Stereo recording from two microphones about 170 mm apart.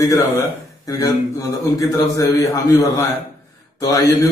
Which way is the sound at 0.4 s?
20° left (ahead or behind).